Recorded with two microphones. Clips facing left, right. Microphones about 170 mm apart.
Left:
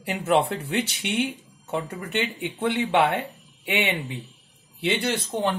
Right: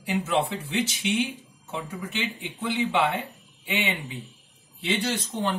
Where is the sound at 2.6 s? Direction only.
65° left (ahead or behind).